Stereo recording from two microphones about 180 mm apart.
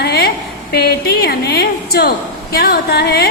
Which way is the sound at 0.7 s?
60° left (ahead or behind).